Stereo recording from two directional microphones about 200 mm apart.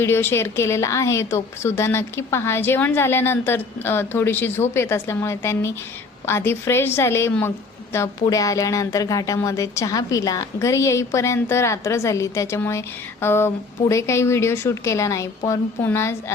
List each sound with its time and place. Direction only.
0.0 s a woman's voice: 10° left (ahead or behind)